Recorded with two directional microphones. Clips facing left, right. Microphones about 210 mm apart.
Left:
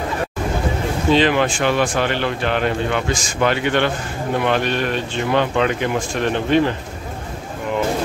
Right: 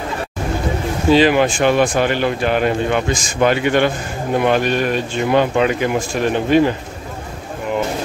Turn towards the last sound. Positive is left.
turn(degrees=-10)  # may be behind; listen again after turning